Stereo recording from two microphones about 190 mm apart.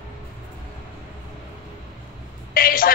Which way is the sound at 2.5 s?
50° left (ahead or behind).